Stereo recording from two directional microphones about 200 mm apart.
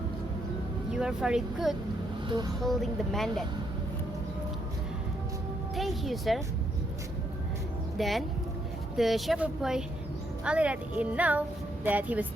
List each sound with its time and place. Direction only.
0.9 s speech: 5° right (ahead or behind)
5.7 s speech: centre (ahead or behind)
7.9 s speech: centre (ahead or behind)